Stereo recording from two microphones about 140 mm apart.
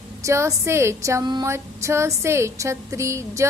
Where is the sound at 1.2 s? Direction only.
30° right (ahead or behind).